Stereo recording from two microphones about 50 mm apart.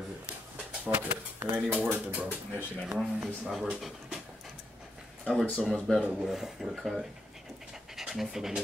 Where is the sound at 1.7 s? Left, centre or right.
Right.